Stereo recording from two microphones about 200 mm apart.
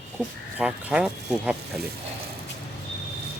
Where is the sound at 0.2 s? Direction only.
5° right (ahead or behind).